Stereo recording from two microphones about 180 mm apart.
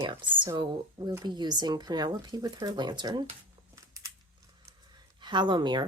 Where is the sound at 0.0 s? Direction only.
30° right (ahead or behind).